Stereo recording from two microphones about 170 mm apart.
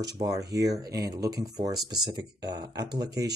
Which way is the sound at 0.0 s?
20° right (ahead or behind).